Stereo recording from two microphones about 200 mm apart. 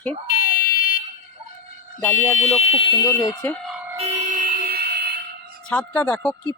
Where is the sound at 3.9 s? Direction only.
35° right (ahead or behind); by 5.2 s 55° right (ahead or behind).